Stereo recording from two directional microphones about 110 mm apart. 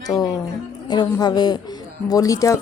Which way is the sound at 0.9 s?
40° left (ahead or behind).